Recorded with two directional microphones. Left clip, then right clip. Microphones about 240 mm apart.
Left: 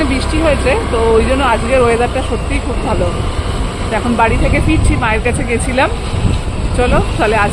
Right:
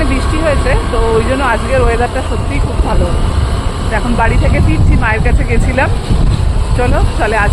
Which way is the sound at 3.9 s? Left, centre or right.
Centre.